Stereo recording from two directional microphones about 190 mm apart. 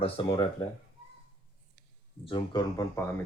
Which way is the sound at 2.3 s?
25° left (ahead or behind).